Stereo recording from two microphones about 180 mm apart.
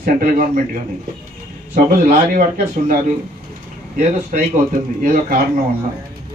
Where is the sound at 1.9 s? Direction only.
50° right (ahead or behind).